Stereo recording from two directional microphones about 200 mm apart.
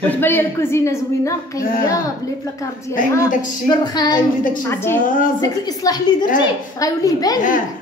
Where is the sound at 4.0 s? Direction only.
20° left (ahead or behind).